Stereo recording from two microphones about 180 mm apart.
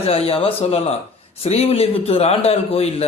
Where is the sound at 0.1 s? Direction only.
35° left (ahead or behind).